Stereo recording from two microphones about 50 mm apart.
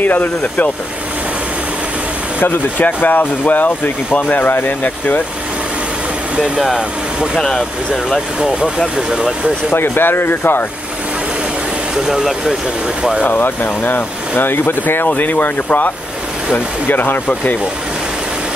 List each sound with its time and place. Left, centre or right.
0.0 s speech: left
2.8 s speech: left
6.3 s speech: centre
7.3 s speech: centre
8.7 s speech: centre
9.7 s speech: left
11.9 s speech: centre
13.2 s speech: left